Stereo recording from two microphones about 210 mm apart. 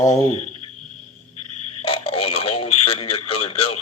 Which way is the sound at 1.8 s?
25° left (ahead or behind).